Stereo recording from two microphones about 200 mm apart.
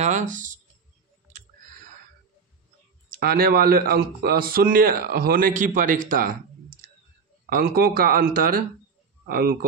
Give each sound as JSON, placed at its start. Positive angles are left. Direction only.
{"t": 0.0, "sound": "a sound", "side_deg": -40}
{"t": 3.2, "sound": "speech", "side_deg": -50}
{"t": 7.4, "sound": "speech", "side_deg": -50}